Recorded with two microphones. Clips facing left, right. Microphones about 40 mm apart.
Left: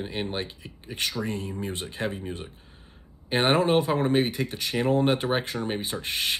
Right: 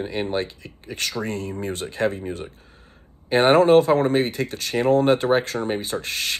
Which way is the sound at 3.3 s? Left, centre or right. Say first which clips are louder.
Right 7 dB; centre.